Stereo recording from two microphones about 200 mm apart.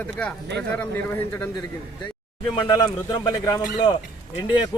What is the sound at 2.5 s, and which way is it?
Speech, 20° left (ahead or behind).